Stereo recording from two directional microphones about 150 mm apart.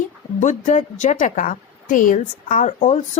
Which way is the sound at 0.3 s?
55° left (ahead or behind).